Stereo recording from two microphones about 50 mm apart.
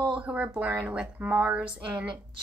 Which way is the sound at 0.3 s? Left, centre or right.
Right.